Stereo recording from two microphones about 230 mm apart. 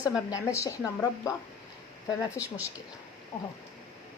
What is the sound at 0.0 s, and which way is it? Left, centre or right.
Speech, centre.